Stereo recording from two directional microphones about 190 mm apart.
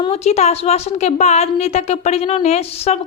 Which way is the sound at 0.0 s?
35° left (ahead or behind).